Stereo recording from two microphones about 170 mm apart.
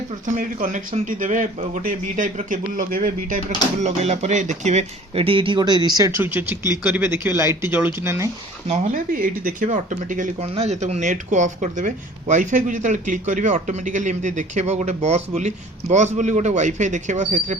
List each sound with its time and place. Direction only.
0.3 s a man's voice: 50° right (ahead or behind)
3.8 s speech: 40° right (ahead or behind); by 8.3 s 15° right (ahead or behind)
8.6 s a man's voice: 40° right (ahead or behind)
10.4 s a man's voice: 35° right (ahead or behind)